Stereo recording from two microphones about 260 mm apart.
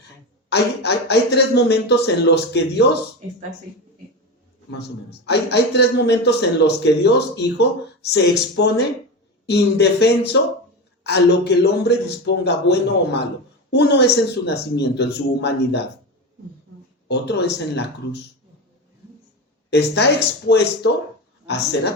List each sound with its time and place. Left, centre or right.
0.5 s speech: left
5.2 s speech: left
17.1 s speech: left
19.7 s speech: left